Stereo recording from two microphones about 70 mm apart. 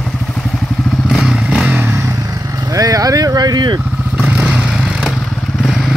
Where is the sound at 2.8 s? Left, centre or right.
Right.